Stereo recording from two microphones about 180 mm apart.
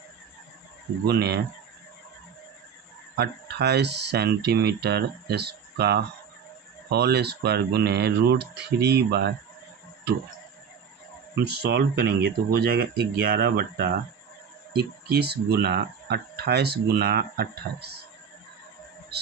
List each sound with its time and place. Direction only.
1.0 s speech: 65° right (ahead or behind)
3.2 s speech: 65° right (ahead or behind)
11.4 s speech: 65° right (ahead or behind)